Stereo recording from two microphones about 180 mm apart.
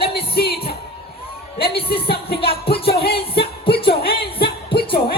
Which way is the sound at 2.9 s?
60° left (ahead or behind).